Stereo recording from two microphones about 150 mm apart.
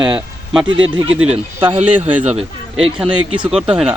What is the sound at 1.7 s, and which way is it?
Speech, 45° right (ahead or behind).